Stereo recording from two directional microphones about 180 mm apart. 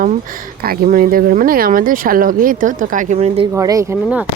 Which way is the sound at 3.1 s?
35° right (ahead or behind).